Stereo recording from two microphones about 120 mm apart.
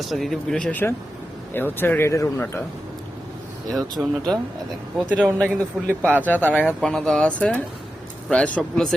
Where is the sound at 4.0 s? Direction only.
5° right (ahead or behind).